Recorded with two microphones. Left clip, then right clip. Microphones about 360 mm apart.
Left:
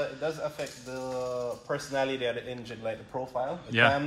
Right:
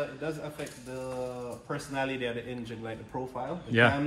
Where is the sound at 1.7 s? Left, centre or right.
Centre.